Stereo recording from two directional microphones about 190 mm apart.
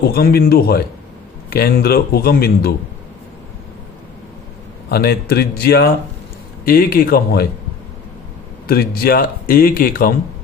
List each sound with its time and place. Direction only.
0.1 s speech: 55° left (ahead or behind)
4.9 s speech: 55° left (ahead or behind)
8.6 s speech: 55° left (ahead or behind)